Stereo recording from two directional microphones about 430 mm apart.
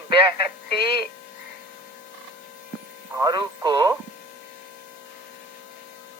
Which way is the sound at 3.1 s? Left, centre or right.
Centre.